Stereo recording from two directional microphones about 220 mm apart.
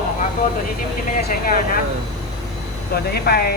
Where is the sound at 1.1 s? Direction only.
40° left (ahead or behind).